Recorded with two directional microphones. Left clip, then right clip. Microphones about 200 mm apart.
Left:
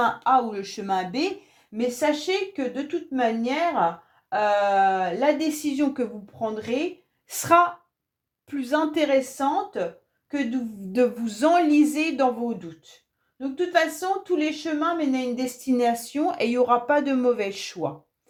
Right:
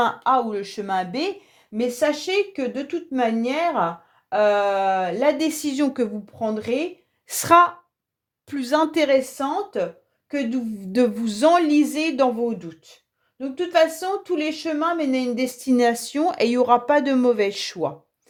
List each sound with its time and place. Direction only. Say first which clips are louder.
0.0 s a woman's voice: right 1 dB; 35° right (ahead or behind)